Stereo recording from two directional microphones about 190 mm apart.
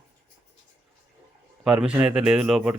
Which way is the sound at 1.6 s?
5° right (ahead or behind).